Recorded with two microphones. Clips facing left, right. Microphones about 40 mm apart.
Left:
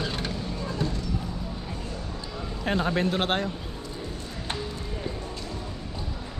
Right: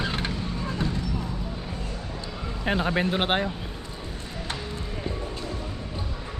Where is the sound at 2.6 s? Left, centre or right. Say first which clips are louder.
Right 1 dB; centre.